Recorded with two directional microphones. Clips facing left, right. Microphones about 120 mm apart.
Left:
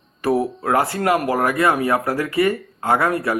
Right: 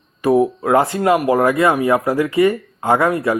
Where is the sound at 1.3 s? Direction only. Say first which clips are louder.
Right 4 dB; 20° right (ahead or behind).